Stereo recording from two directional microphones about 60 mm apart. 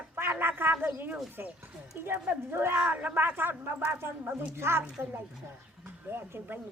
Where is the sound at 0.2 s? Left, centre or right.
Right.